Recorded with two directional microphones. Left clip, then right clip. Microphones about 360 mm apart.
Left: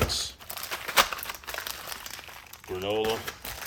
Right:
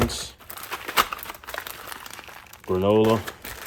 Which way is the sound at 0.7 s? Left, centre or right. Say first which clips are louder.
Right 1 dB; centre.